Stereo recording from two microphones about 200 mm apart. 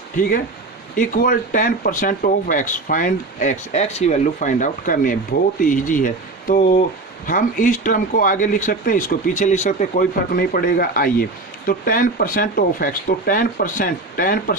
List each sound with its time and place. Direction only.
0.9 s speech: 45° left (ahead or behind)